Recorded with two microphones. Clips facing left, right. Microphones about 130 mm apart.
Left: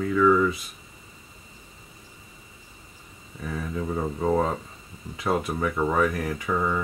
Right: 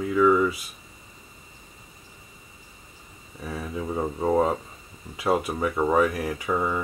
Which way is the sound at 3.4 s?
10° right (ahead or behind).